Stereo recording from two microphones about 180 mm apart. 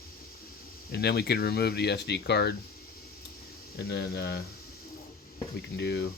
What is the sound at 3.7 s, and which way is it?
Speech, 70° left (ahead or behind).